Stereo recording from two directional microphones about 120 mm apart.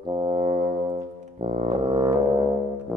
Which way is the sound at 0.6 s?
55° right (ahead or behind).